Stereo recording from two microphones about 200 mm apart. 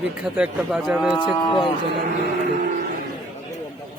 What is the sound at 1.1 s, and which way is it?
Speech, 20° left (ahead or behind).